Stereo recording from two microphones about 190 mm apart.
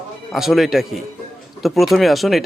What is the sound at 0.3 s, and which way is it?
Speech, centre (ahead or behind).